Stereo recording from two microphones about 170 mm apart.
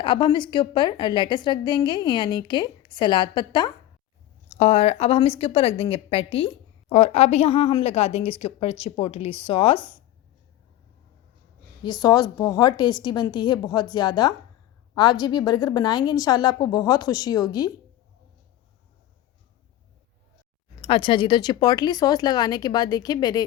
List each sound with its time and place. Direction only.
0.0 s a woman's voice: 30° left (ahead or behind)
4.4 s a woman's voice: 40° left (ahead or behind)
11.8 s a woman's voice: 25° left (ahead or behind)
20.8 s a woman's voice: 30° left (ahead or behind)